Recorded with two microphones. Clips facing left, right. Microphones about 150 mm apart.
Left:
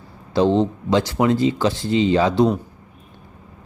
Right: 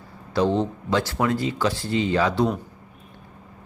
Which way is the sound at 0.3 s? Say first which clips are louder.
Left 5 dB; 25° left (ahead or behind).